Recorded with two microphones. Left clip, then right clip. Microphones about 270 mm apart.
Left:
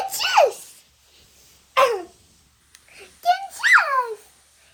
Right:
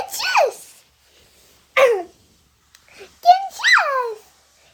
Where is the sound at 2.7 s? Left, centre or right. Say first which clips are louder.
Right 3 dB; right.